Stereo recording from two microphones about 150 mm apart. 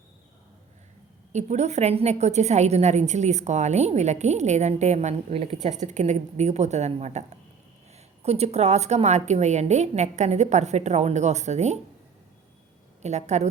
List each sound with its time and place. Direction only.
1.3 s a woman's voice: 50° right (ahead or behind)
13.0 s a woman's voice: 50° right (ahead or behind)